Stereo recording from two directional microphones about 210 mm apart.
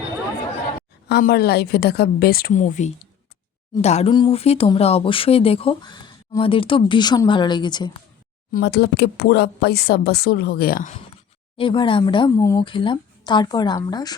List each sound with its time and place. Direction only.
1.0 s speech: 50° left (ahead or behind); by 7.9 s 20° left (ahead or behind)
8.5 s speech: 50° left (ahead or behind)
11.5 s speech: 25° left (ahead or behind)